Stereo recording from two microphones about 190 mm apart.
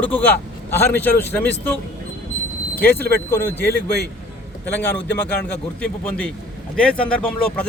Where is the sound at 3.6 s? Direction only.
55° left (ahead or behind).